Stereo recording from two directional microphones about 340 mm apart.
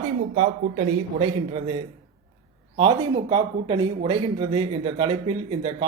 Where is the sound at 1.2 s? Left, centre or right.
Centre.